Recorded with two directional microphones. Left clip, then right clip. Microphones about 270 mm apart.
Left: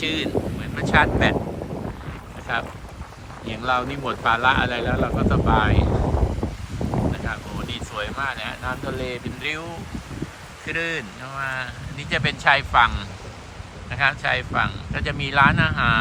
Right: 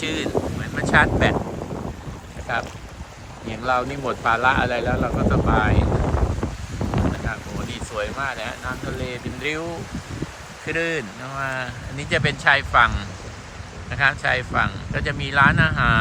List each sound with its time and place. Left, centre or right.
0.0 s speech: centre
2.5 s speech: centre
5.8 s boat: left
7.3 s speech: centre
10.7 s speech: centre